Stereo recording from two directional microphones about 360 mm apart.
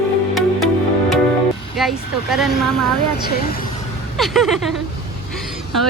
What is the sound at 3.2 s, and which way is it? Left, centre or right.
Speech, left.